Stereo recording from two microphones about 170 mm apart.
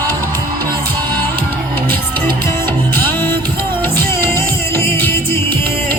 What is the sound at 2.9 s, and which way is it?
Music, 10° left (ahead or behind).